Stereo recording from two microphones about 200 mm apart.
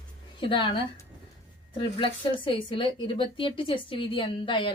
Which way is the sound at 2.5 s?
25° left (ahead or behind).